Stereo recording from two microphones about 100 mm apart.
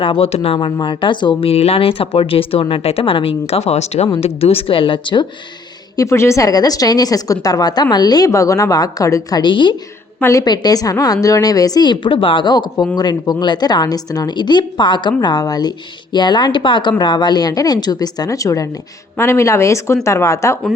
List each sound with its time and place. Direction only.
0.0 s speech: 70° left (ahead or behind); by 0.6 s 90° left
0.6 s a woman's voice: 55° left (ahead or behind)
1.5 s speech: 85° left; by 5.2 s 55° left (ahead or behind)
6.0 s a woman's voice: 30° left (ahead or behind)
9.4 s a woman's voice: 55° left (ahead or behind)
10.2 s a woman's voice: 25° left (ahead or behind)
10.4 s a woman's voice: 45° left (ahead or behind)